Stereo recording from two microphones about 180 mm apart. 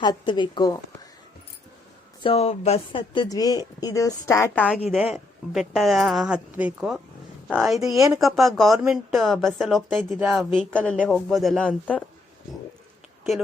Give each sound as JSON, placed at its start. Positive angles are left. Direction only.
{"t": 0.0, "sound": "a woman's voice", "side_deg": 25}
{"t": 2.2, "sound": "a woman's voice", "side_deg": 35}
{"t": 4.9, "sound": "speech", "side_deg": -5}